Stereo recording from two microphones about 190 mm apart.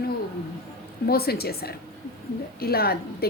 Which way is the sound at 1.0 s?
55° left (ahead or behind).